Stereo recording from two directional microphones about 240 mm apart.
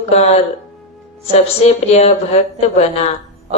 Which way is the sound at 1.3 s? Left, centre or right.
Left.